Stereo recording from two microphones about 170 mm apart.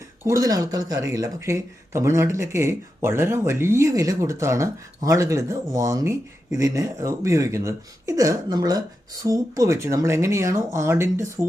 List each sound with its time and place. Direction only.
0.3 s speech: 20° right (ahead or behind)